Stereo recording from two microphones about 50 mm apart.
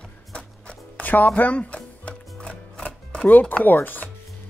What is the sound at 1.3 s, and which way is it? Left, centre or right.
Music, left.